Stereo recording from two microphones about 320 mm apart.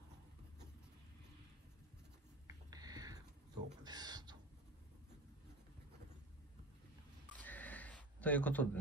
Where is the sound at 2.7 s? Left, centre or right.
Centre.